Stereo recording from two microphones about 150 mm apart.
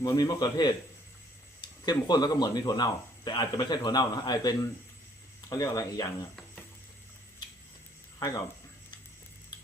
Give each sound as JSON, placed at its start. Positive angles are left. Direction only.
{"t": 0.0, "sound": "speech", "side_deg": 25}
{"t": 1.8, "sound": "speech", "side_deg": 25}